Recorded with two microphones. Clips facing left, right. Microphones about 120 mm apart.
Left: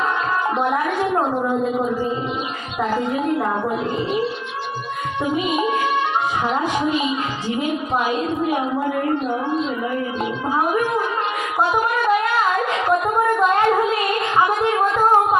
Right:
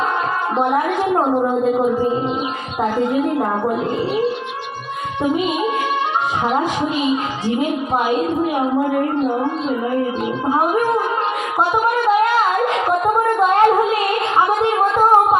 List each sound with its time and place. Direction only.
0.5 s a woman's voice: 25° right (ahead or behind)
13.4 s a sound: 25° right (ahead or behind)
14.3 s music: 25° right (ahead or behind)